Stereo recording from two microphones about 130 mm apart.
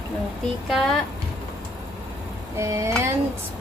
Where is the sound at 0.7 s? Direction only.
Centre (ahead or behind).